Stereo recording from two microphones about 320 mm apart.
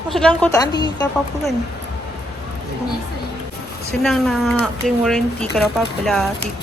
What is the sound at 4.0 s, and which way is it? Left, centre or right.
Speech, centre.